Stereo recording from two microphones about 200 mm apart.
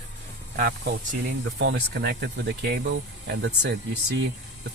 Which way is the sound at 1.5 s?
60° right (ahead or behind).